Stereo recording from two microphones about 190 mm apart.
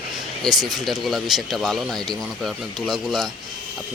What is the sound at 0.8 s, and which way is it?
Speech, centre (ahead or behind).